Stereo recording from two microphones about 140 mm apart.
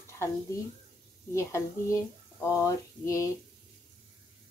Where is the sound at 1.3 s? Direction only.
20° left (ahead or behind).